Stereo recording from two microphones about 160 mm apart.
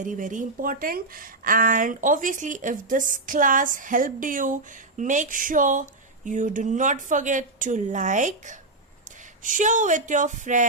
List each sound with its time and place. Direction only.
0.0 s a woman's voice: 55° right (ahead or behind)